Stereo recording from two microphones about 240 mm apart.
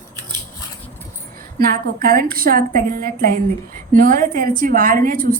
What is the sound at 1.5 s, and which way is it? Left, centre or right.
A woman's voice, right.